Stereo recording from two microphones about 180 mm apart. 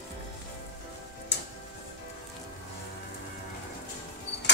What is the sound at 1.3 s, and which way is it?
Tick-tock, 70° left (ahead or behind).